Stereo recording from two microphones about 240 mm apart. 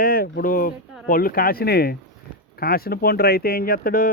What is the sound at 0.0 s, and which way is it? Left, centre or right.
Speech, left.